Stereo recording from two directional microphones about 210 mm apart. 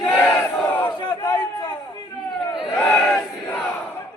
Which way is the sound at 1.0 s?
20° left (ahead or behind).